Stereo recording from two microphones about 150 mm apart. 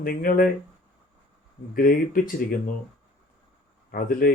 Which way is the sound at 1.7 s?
70° left (ahead or behind).